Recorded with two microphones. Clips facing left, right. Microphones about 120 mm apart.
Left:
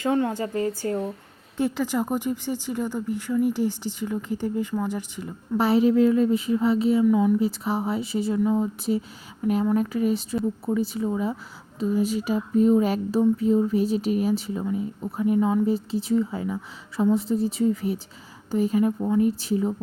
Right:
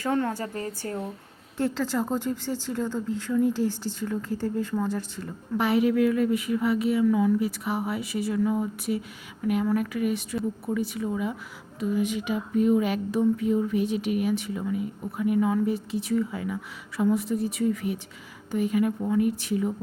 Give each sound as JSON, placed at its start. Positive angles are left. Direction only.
{"t": 0.0, "sound": "speech", "side_deg": 15}
{"t": 1.5, "sound": "speech", "side_deg": 15}
{"t": 5.5, "sound": "speech", "side_deg": 30}